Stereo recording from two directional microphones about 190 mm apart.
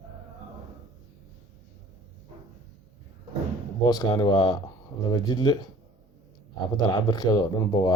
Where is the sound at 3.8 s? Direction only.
20° left (ahead or behind).